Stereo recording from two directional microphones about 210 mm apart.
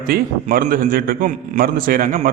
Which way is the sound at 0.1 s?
45° right (ahead or behind).